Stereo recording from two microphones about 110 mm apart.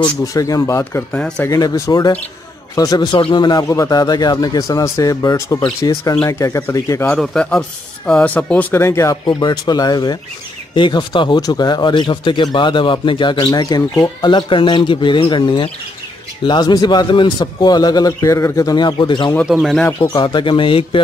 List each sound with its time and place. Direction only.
0.0 s speech: 30° left (ahead or behind)
1.1 s speech: 10° left (ahead or behind)
1.4 s speech: 30° left (ahead or behind)
7.1 s speech: 10° left (ahead or behind); by 9.2 s 30° left (ahead or behind)
9.2 s speech: 40° left (ahead or behind)
14.3 s speech: 45° left (ahead or behind); by 18.8 s 30° left (ahead or behind)
18.8 s speech: 45° left (ahead or behind)
19.4 s speech: 5° right (ahead or behind)
20.2 s speech: 45° left (ahead or behind)